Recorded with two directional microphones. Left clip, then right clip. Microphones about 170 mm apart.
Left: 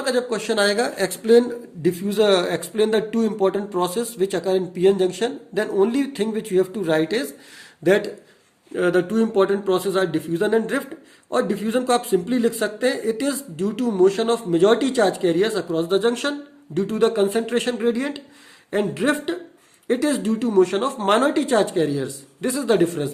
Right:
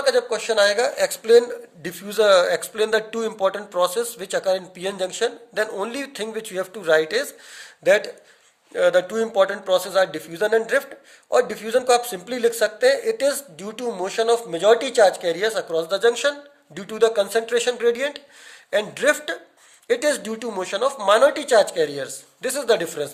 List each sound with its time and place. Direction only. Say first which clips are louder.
0.0 s speech: right 2 dB; 30° right (ahead or behind)
8.7 s a man's voice: right 2 dB; 35° right (ahead or behind)